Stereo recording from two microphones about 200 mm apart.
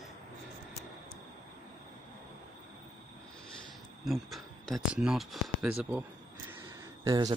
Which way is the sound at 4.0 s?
Centre (ahead or behind).